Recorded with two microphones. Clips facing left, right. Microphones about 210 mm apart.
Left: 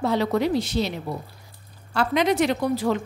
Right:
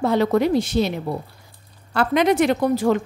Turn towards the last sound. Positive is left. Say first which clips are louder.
# right 4 dB
turn(degrees=-50)  # may be behind; listen again after turning